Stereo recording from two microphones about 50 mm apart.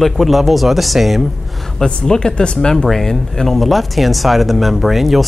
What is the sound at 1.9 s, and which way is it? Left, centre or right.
Speech, centre.